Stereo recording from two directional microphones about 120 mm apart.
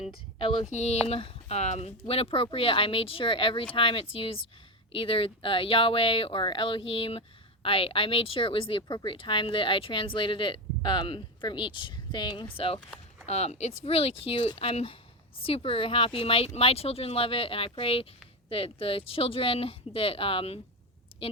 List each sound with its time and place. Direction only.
0.3 s speech: 50° left (ahead or behind)
0.7 s speech: 70° left (ahead or behind)
2.0 s speech: 50° left (ahead or behind)
12.5 s speech: 50° left (ahead or behind)
13.2 s speech: 65° left (ahead or behind); by 20.6 s 50° left (ahead or behind)